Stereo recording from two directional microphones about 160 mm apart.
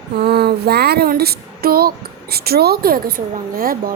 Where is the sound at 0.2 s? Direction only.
90° right; by 1.9 s 70° right (ahead or behind).